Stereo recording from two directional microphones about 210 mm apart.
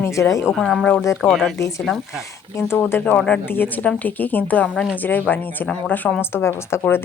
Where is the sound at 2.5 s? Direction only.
10° left (ahead or behind).